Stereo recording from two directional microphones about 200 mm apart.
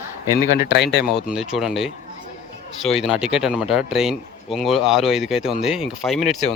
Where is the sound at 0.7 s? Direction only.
60° left (ahead or behind).